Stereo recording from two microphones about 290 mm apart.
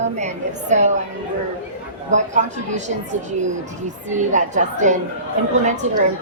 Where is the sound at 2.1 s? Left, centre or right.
Right.